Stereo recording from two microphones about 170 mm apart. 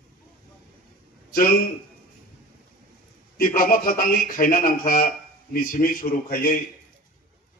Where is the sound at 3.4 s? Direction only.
55° left (ahead or behind).